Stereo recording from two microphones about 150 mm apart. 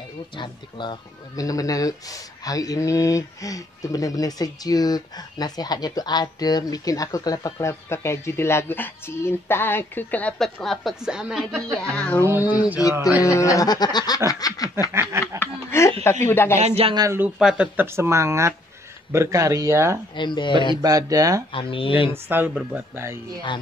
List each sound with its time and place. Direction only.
0.4 s speech: 30° left (ahead or behind); by 11.6 s 5° right (ahead or behind)
11.9 s music: 10° left (ahead or behind)
12.4 s speech: 25° left (ahead or behind)
14.9 s speech: 15° right (ahead or behind)
15.3 s snicker: 15° left (ahead or behind)
16.3 s music: 15° left (ahead or behind)
16.5 s speech: 45° right (ahead or behind)
16.9 s speech: 25° right (ahead or behind)
17.2 s speech: 5° right (ahead or behind)
17.8 s speech: 15° right (ahead or behind)
20.2 s speech: 30° left (ahead or behind)
20.7 s speech: 25° right (ahead or behind)
21.5 s speech: 35° left (ahead or behind)
22.1 s speech: 15° right (ahead or behind)